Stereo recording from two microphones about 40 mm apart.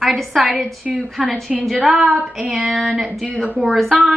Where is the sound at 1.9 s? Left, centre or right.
Centre.